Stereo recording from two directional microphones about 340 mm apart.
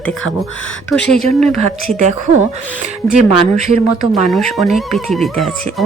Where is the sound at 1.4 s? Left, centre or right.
Centre.